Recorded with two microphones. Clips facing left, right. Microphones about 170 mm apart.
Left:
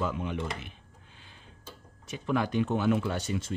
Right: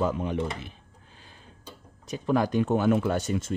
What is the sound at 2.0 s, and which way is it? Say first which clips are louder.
Speech: right 4 dB; 40° right (ahead or behind).